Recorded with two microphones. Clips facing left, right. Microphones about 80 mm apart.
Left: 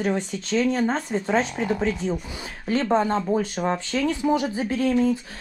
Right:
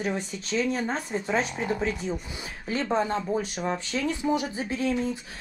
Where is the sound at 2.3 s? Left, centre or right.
Left.